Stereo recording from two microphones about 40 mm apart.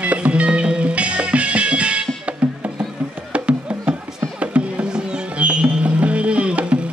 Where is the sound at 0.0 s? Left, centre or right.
Right.